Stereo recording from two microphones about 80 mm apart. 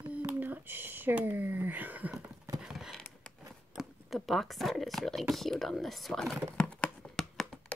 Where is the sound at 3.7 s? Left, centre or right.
Centre.